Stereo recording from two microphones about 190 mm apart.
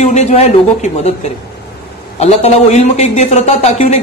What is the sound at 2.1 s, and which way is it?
Speech, 35° left (ahead or behind).